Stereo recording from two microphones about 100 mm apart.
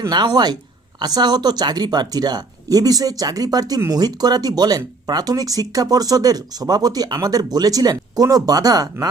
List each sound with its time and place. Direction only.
0.0 s a woman's voice: 45° right (ahead or behind)